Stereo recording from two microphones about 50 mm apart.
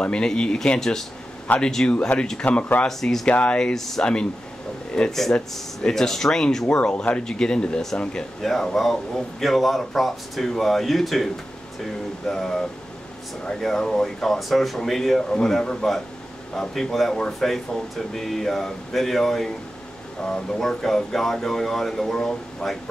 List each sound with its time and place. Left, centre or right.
0.0 s speech: centre
1.9 s speech: left
3.0 s speech: centre
3.3 s speech: left
6.8 s speech: left
8.4 s speech: centre
12.3 s speech: centre